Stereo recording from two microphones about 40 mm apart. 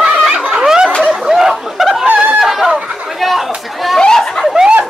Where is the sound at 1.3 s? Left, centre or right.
Centre.